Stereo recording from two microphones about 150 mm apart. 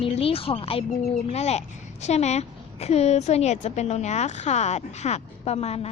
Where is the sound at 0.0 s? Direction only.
40° left (ahead or behind).